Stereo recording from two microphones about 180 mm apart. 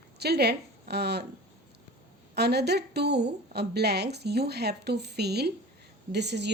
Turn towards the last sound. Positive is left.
turn(degrees=-70)  # may be behind; listen again after turning